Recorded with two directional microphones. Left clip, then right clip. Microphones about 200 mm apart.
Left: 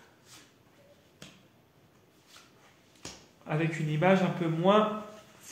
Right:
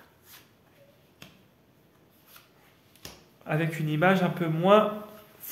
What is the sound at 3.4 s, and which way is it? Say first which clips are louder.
Speech: right 2 dB; 50° right (ahead or behind).